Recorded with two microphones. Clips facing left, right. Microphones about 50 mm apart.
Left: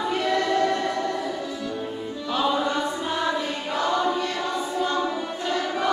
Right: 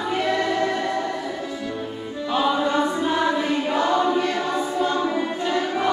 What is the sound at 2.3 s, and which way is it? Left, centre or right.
Choir, centre.